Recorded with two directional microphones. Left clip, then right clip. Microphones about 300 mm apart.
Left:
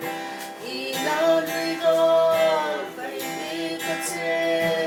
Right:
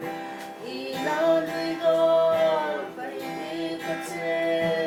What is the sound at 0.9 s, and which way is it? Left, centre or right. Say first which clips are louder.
Music: left 2 dB; centre.